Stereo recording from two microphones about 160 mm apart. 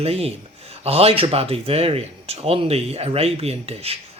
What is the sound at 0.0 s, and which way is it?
Speech, 40° right (ahead or behind).